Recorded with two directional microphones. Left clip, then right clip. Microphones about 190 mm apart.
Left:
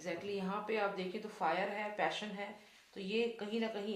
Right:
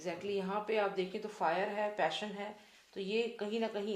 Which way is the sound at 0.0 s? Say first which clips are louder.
Right 3 dB; 35° right (ahead or behind).